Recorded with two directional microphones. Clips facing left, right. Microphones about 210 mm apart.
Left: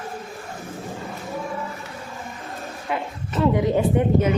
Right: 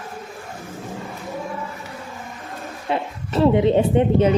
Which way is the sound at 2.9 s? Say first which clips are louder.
Right 4 dB; 30° right (ahead or behind).